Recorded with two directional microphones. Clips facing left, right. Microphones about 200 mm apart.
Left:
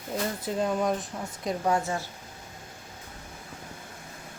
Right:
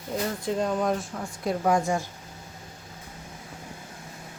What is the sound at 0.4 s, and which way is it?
Speech, centre (ahead or behind).